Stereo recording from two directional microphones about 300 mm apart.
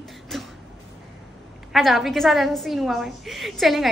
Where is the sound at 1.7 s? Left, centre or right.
Centre.